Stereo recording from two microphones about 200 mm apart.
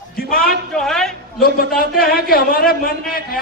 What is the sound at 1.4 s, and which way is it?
A man's voice, 45° left (ahead or behind).